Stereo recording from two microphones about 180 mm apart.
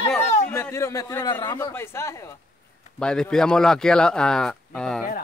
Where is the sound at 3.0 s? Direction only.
5° left (ahead or behind).